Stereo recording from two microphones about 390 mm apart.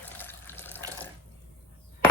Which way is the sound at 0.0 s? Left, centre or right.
Centre.